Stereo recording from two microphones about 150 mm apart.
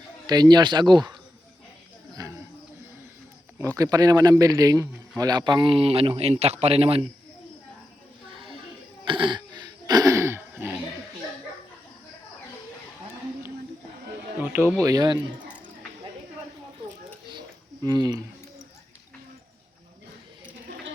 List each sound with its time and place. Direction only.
0.3 s speech: 25° right (ahead or behind)
3.8 s a man's voice: 25° right (ahead or behind); by 7.1 s 40° right (ahead or behind)
9.0 s throat clearing: 35° right (ahead or behind); by 10.8 s 15° right (ahead or behind)
14.5 s speech: 10° right (ahead or behind)
14.8 s speech: 25° right (ahead or behind)
17.8 s speech: 30° right (ahead or behind)